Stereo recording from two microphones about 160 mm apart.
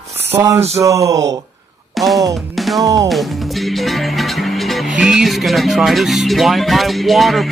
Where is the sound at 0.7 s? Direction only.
20° right (ahead or behind).